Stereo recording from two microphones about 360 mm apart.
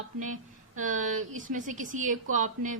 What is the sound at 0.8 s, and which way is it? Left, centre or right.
A woman's voice, right.